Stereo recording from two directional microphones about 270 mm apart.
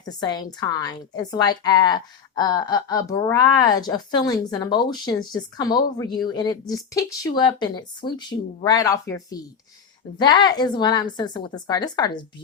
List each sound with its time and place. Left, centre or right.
0.1 s a woman's voice: centre